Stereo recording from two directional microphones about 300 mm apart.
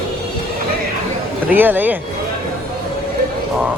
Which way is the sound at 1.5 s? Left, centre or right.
Centre.